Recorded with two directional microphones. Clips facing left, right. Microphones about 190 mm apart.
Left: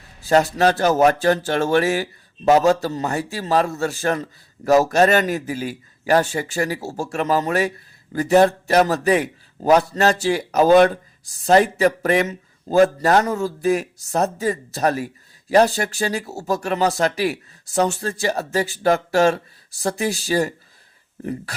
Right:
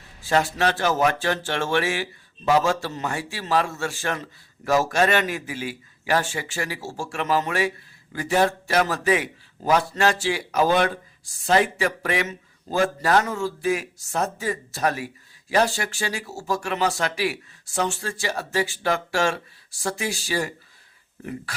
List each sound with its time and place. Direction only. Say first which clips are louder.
0.2 s speech: left 5 dB; 40° left (ahead or behind)